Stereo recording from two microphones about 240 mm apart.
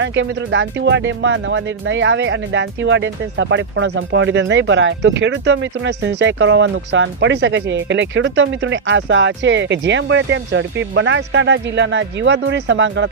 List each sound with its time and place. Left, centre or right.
0.0 s speech: right